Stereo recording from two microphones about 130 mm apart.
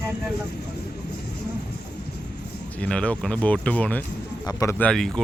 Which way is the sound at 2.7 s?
10° left (ahead or behind).